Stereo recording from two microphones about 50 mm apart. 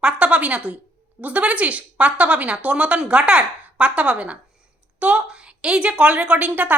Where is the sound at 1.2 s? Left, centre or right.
Right.